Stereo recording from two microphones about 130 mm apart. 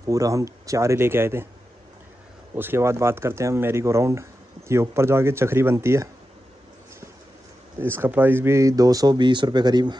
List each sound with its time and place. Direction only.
0.0 s speech: 25° right (ahead or behind)
2.5 s speech: 15° right (ahead or behind)
7.8 s speech: 15° right (ahead or behind); by 9.9 s 35° right (ahead or behind)